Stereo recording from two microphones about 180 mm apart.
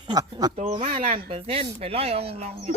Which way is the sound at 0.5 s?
35° right (ahead or behind).